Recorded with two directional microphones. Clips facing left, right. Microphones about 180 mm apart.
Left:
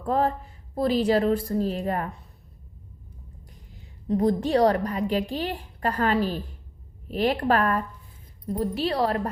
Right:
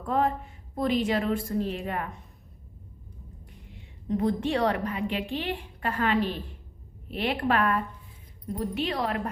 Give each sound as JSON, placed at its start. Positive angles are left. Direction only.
{"t": 0.0, "sound": "a woman's voice", "side_deg": 35}
{"t": 3.5, "sound": "a woman's voice", "side_deg": 35}